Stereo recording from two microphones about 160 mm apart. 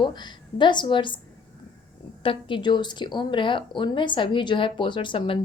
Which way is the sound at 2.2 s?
30° left (ahead or behind).